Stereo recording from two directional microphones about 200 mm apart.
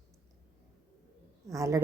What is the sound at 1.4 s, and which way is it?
Speech, 15° right (ahead or behind).